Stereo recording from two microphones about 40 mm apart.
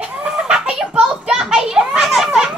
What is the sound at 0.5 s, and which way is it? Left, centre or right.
Children playing, right.